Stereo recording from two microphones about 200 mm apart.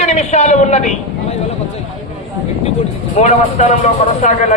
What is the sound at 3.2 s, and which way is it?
A man's voice, 35° left (ahead or behind).